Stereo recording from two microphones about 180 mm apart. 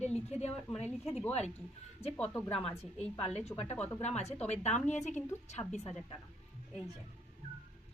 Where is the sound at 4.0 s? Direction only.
35° left (ahead or behind).